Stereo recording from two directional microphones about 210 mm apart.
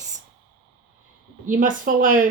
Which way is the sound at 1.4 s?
40° right (ahead or behind).